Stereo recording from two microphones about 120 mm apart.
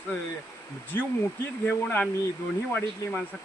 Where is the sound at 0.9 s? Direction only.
20° left (ahead or behind).